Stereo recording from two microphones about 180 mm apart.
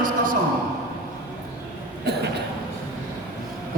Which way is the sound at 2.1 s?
65° right (ahead or behind).